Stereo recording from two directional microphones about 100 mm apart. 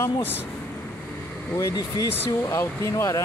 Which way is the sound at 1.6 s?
30° left (ahead or behind).